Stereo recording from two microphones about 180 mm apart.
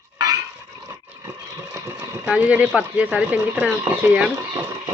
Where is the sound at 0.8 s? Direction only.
20° right (ahead or behind).